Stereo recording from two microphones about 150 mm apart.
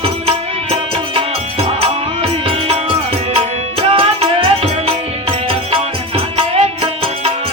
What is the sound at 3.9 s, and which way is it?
Music, 40° right (ahead or behind).